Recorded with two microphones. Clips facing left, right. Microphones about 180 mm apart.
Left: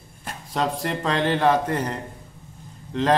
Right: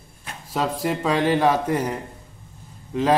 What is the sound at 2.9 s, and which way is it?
Speech, 10° right (ahead or behind).